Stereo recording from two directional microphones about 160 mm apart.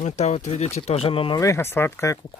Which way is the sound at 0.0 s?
45° left (ahead or behind).